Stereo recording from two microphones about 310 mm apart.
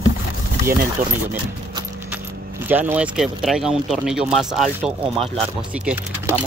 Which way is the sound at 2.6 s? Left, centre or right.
Centre.